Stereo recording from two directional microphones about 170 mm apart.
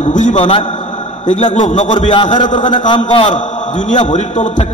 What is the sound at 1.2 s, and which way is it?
Speech, 45° left (ahead or behind).